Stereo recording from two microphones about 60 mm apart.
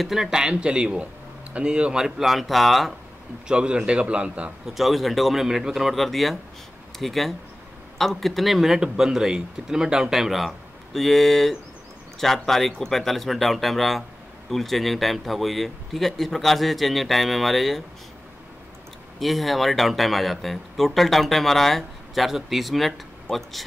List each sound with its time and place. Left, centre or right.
0.0 s speech: centre
3.4 s speech: centre
4.7 s speech: centre
19.1 s speech: centre